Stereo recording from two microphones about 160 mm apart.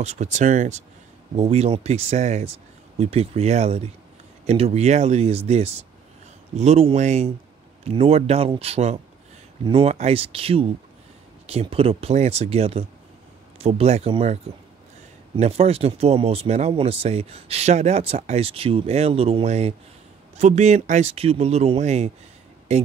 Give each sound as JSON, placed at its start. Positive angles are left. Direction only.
{"t": 0.0, "sound": "speech", "side_deg": -45}